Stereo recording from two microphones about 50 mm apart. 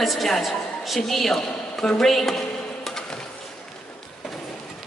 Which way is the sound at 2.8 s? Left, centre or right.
Centre.